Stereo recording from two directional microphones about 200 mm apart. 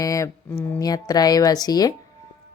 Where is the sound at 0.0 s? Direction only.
15° left (ahead or behind).